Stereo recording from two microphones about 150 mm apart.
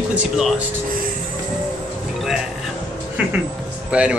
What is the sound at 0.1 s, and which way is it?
Speech, 5° right (ahead or behind).